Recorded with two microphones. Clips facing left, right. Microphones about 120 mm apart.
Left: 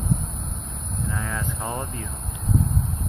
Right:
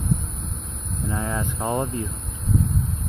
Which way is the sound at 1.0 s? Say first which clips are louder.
Right 4 dB; 25° right (ahead or behind).